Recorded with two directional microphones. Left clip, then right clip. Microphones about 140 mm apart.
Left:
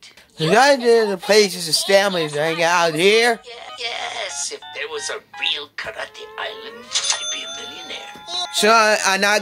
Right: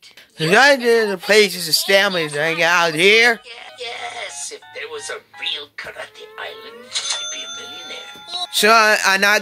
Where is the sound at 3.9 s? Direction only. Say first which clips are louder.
Left 2 dB; 35° left (ahead or behind).